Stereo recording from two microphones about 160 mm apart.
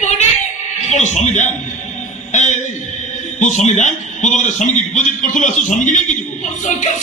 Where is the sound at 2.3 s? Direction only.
50° left (ahead or behind).